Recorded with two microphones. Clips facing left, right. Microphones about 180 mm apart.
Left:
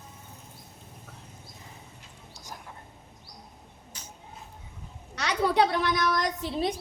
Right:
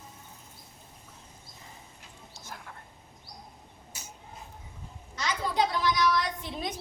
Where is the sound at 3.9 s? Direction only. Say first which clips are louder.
Even; 10° right (ahead or behind).